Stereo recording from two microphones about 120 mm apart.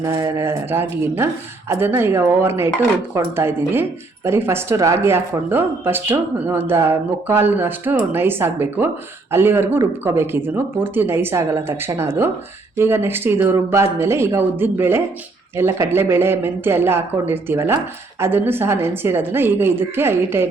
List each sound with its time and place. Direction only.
0.0 s speech: 25° right (ahead or behind)